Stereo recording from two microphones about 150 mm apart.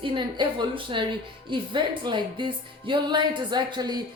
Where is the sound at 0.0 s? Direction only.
30° right (ahead or behind).